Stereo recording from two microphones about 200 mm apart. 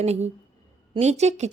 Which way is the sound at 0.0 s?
35° right (ahead or behind).